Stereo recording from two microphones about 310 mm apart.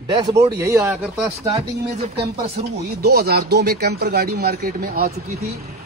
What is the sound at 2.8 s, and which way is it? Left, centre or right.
Speech, right.